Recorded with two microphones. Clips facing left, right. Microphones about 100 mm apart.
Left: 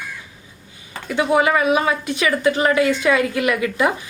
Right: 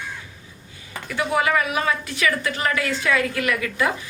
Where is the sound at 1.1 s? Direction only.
25° left (ahead or behind).